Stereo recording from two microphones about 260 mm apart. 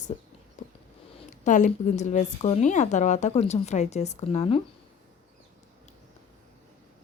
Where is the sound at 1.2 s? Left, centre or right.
Left.